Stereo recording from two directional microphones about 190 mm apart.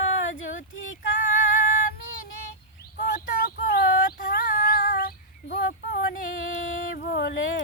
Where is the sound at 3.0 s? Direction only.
50° left (ahead or behind).